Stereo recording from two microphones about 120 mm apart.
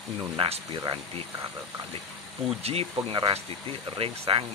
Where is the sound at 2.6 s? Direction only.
55° right (ahead or behind).